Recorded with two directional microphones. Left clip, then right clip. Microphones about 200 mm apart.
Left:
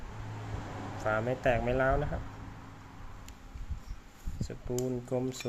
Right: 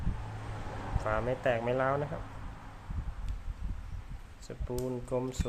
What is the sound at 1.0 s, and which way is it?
Speech, 5° left (ahead or behind).